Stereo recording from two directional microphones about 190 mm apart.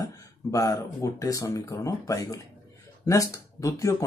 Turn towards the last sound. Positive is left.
turn(degrees=15)  # may be behind; listen again after turning